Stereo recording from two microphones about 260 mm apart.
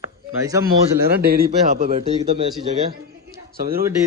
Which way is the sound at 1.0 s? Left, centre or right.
Right.